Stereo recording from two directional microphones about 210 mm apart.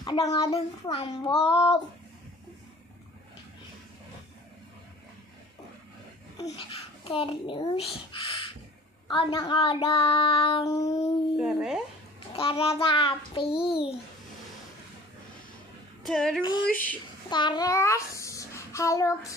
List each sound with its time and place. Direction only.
0.0 s a child's voice: 20° left (ahead or behind)
0.5 s child singing: 30° left (ahead or behind)
1.5 s a sound: 15° left (ahead or behind)
6.7 s a child's voice: 25° left (ahead or behind)
9.0 s child singing: 25° left (ahead or behind)
11.3 s speech: centre (ahead or behind)
12.4 s child singing: 25° left (ahead or behind)
16.0 s female singing: centre (ahead or behind)
17.3 s a child's voice: 20° left (ahead or behind)